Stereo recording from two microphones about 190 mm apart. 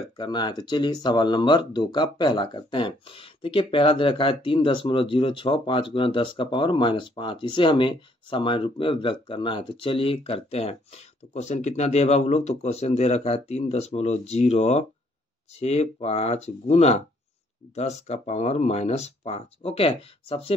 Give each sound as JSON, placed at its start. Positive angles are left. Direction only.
{"t": 0.2, "sound": "speech", "side_deg": 25}